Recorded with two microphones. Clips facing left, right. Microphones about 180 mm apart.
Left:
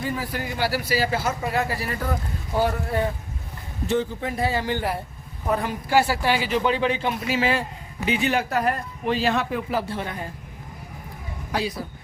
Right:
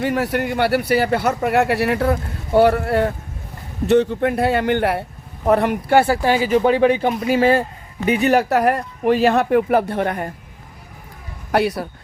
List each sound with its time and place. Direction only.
0.0 s speech: 75° right (ahead or behind); by 7.6 s 50° right (ahead or behind)
8.2 s speech: 40° right (ahead or behind)
8.4 s speech: 70° right (ahead or behind)
9.0 s speech: 55° right (ahead or behind)
11.5 s speech: 70° right (ahead or behind)